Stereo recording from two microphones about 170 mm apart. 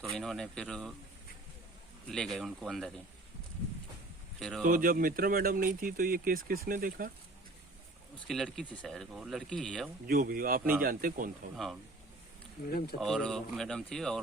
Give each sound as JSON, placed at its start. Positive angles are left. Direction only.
{"t": 0.1, "sound": "speech", "side_deg": 0}
{"t": 2.0, "sound": "speech", "side_deg": 5}
{"t": 4.4, "sound": "speech", "side_deg": 0}
{"t": 4.6, "sound": "speech", "side_deg": -55}
{"t": 8.3, "sound": "speech", "side_deg": 0}
{"t": 10.1, "sound": "speech", "side_deg": -55}
{"t": 11.5, "sound": "speech", "side_deg": 0}
{"t": 12.6, "sound": "speech", "side_deg": 65}
{"t": 13.0, "sound": "speech", "side_deg": 0}